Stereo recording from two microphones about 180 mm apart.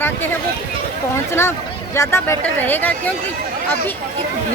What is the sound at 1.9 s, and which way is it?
Speech, 15° left (ahead or behind).